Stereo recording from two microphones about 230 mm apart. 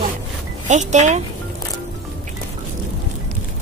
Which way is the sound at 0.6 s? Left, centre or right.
Right.